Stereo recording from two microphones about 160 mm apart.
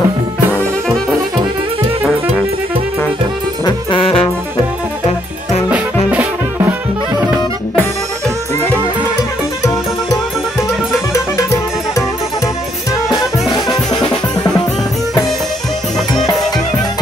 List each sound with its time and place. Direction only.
3.6 s music: 35° left (ahead or behind)
5.7 s music: 10° right (ahead or behind)
13.1 s music: centre (ahead or behind)